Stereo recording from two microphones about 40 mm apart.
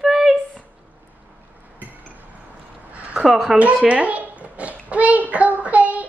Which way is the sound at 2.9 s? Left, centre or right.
Right.